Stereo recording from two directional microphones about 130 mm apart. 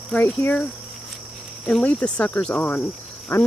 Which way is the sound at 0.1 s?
10° left (ahead or behind).